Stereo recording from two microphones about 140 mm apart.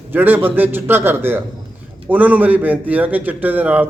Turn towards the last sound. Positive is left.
turn(degrees=-10)  # may be behind; listen again after turning